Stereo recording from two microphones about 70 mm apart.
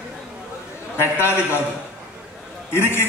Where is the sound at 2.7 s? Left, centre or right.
Left.